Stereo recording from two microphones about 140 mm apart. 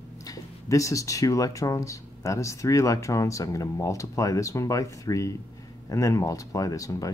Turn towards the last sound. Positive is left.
turn(degrees=25)  # may be behind; listen again after turning